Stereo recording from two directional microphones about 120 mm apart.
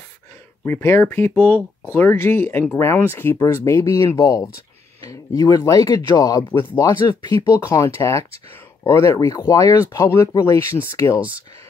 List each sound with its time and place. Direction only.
0.7 s speech: 20° left (ahead or behind)
7.5 s speech: 25° left (ahead or behind)